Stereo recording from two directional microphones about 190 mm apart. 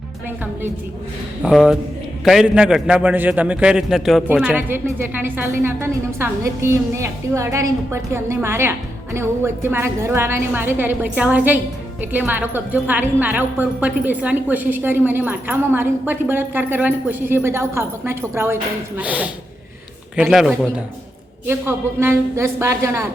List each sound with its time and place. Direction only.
1.4 s a man's voice: 5° right (ahead or behind)
21.4 s a woman's voice: 10° right (ahead or behind)